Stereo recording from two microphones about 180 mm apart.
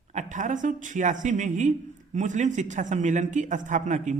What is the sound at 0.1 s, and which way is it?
A man's voice, 40° right (ahead or behind).